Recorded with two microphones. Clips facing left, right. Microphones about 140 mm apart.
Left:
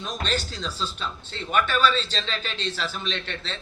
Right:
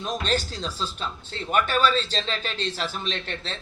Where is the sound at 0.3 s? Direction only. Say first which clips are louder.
Right 1 dB; 45° right (ahead or behind).